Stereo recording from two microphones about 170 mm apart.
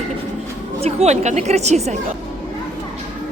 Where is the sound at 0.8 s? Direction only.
40° right (ahead or behind).